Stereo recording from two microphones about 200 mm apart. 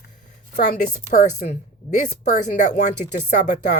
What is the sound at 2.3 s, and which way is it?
Speech, 40° left (ahead or behind).